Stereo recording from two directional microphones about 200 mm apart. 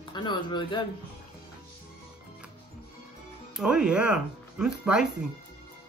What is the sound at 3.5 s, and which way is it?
Speech, 5° right (ahead or behind).